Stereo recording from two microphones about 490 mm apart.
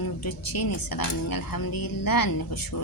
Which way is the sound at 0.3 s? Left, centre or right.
Left.